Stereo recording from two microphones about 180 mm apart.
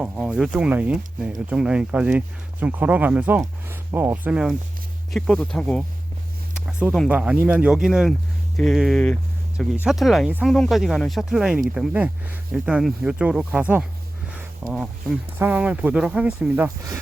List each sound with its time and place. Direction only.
0.0 s speech: 5° right (ahead or behind)